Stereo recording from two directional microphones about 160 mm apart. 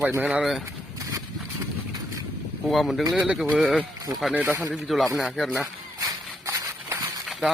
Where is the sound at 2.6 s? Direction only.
Centre (ahead or behind).